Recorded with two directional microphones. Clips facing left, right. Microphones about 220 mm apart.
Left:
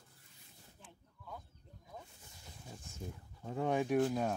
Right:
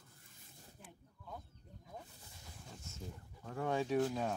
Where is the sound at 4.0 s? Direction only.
5° left (ahead or behind).